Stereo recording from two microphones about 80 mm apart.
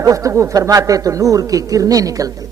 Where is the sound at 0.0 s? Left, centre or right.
Right.